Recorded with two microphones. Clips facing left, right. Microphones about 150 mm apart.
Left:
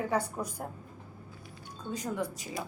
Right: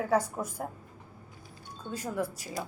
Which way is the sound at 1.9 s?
5° right (ahead or behind).